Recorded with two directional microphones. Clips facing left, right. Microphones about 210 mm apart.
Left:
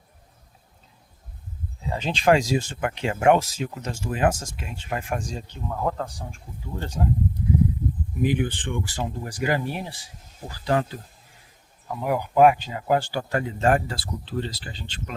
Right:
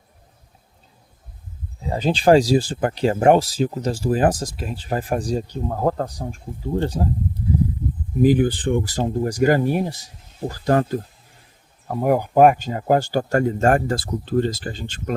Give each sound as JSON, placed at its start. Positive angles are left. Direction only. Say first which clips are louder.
{"t": 1.8, "sound": "speech", "louder": "right 5 dB", "side_deg": -35}
{"t": 8.2, "sound": "speech", "louder": "right 8 dB", "side_deg": -35}